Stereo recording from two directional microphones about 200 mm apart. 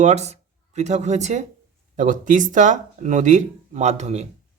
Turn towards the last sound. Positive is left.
turn(degrees=-35)  # may be behind; listen again after turning